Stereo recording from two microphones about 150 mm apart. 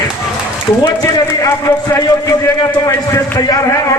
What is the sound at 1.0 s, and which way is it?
A man's voice, 20° left (ahead or behind).